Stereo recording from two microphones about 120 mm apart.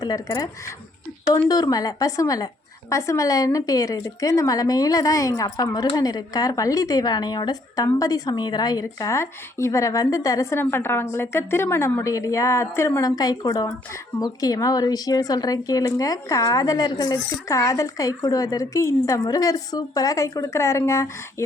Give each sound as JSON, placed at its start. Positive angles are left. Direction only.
{"t": 0.0, "sound": "a woman's voice", "side_deg": 35}